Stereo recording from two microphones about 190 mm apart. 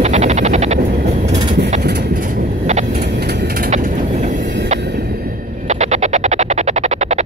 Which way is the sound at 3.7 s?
40° right (ahead or behind).